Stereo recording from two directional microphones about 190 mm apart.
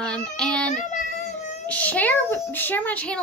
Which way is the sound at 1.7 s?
10° left (ahead or behind).